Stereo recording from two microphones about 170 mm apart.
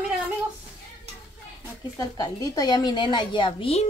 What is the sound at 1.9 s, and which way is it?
Speech, 20° left (ahead or behind).